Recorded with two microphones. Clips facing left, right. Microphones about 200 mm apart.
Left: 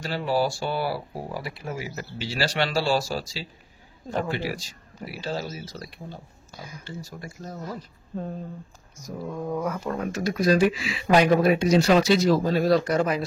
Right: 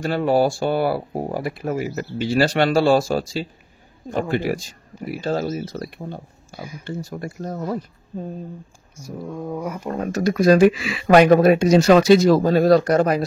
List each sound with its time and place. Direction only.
0.0 s speech: 55° right (ahead or behind)
9.3 s speech: 10° right (ahead or behind)
9.9 s speech: 40° right (ahead or behind)
10.3 s speech: 55° right (ahead or behind)